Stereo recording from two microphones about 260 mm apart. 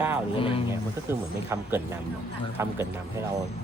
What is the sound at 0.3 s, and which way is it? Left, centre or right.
Speech, centre.